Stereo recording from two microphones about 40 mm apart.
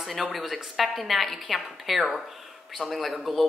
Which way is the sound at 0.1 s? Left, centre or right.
Centre.